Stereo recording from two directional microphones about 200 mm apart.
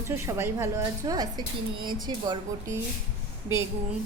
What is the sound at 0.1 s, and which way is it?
A woman's voice, 10° right (ahead or behind).